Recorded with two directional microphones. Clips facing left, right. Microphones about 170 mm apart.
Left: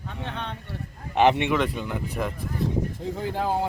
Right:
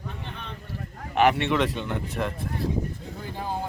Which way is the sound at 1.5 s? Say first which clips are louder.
Even; 5° left (ahead or behind).